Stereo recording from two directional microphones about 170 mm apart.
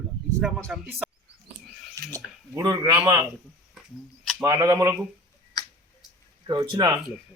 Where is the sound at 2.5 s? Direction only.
20° right (ahead or behind).